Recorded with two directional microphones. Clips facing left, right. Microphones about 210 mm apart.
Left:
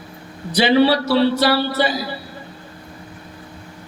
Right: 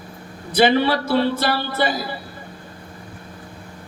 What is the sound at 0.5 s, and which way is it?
A man's voice, 50° right (ahead or behind).